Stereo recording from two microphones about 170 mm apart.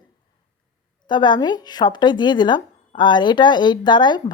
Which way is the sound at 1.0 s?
25° left (ahead or behind).